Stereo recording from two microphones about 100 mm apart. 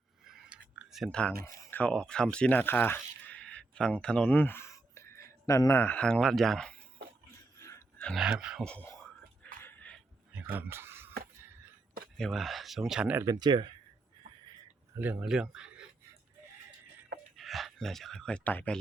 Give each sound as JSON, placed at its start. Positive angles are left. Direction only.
{"t": 0.3, "sound": "a sound", "side_deg": -10}
{"t": 1.7, "sound": "speech", "side_deg": 10}
{"t": 5.8, "sound": "speech", "side_deg": 15}
{"t": 7.6, "sound": "a sound", "side_deg": 30}
{"t": 8.1, "sound": "speech", "side_deg": -5}
{"t": 8.6, "sound": "speech", "side_deg": 10}
{"t": 9.6, "sound": "a sound", "side_deg": 15}
{"t": 10.3, "sound": "a sound", "side_deg": -20}
{"t": 12.1, "sound": "speech", "side_deg": 5}
{"t": 13.2, "sound": "speech", "side_deg": -45}
{"t": 14.9, "sound": "speech", "side_deg": -20}
{"t": 15.2, "sound": "speech", "side_deg": -5}
{"t": 17.3, "sound": "speech", "side_deg": 0}